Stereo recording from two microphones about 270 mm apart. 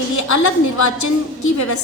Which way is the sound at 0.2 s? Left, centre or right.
Left.